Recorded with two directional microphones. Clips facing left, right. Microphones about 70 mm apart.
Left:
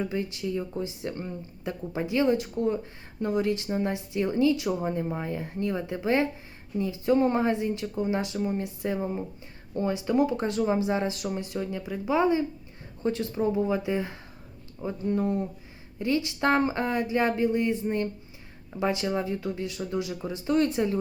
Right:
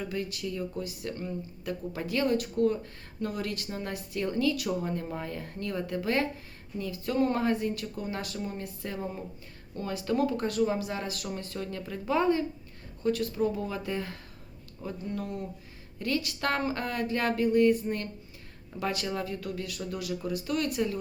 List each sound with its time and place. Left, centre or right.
0.0 s speech: left